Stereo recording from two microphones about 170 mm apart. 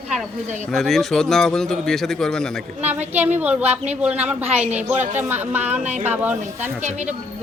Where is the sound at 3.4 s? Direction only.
10° right (ahead or behind).